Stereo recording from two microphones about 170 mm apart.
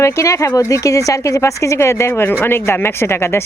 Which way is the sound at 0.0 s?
15° left (ahead or behind).